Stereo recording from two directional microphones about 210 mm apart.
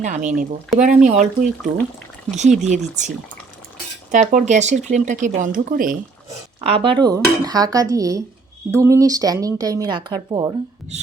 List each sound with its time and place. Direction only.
0.0 s speech: 35° right (ahead or behind)
4.1 s speech: 35° right (ahead or behind)
6.6 s speech: 30° right (ahead or behind)